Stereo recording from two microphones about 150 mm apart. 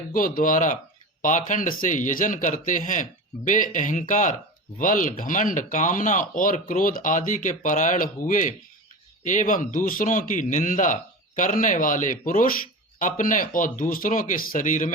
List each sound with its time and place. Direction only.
0.1 s speech: 70° left (ahead or behind)